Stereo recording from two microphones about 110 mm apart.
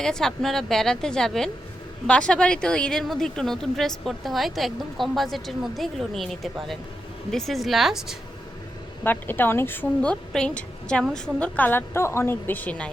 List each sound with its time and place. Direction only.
0.0 s a woman's voice: 5° left (ahead or behind)
9.0 s a woman's voice: 20° left (ahead or behind)